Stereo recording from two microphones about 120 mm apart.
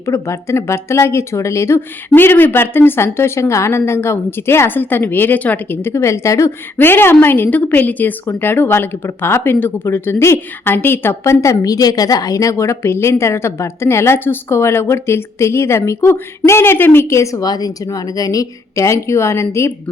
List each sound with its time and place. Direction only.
0.0 s a woman's voice: 25° left (ahead or behind)